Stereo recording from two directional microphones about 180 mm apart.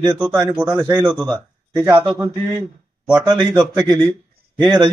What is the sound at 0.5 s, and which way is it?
Speech, 5° right (ahead or behind).